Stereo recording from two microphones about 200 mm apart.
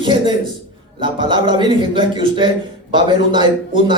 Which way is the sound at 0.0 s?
25° right (ahead or behind).